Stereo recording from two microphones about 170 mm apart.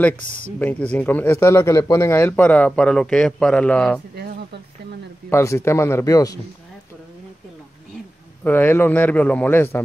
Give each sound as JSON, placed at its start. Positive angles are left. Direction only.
{"t": 0.0, "sound": "speech", "side_deg": 10}
{"t": 4.1, "sound": "a sound", "side_deg": -70}
{"t": 5.3, "sound": "speech", "side_deg": 15}
{"t": 8.5, "sound": "speech", "side_deg": 10}